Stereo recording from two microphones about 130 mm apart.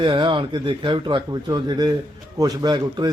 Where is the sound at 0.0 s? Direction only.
40° right (ahead or behind).